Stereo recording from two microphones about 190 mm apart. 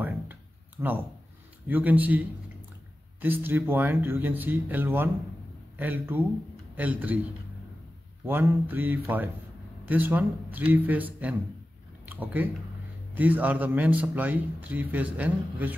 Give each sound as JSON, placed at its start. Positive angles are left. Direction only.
{"t": 0.0, "sound": "a sound", "side_deg": -10}
{"t": 1.7, "sound": "speech", "side_deg": -10}
{"t": 8.3, "sound": "speech", "side_deg": -10}